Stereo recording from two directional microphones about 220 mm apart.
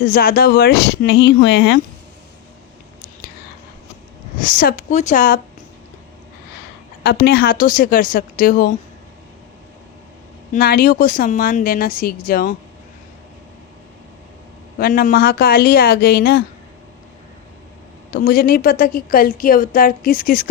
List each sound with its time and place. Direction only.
0.0 s speech: 40° left (ahead or behind)
4.4 s a woman's voice: 40° left (ahead or behind)
7.0 s a woman's voice: 45° left (ahead or behind)
10.5 s a woman's voice: 45° left (ahead or behind)
14.8 s speech: 40° left (ahead or behind)
18.1 s a woman's voice: 40° left (ahead or behind)